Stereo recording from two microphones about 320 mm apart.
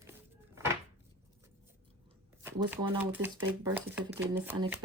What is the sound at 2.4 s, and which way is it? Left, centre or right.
Speech, centre.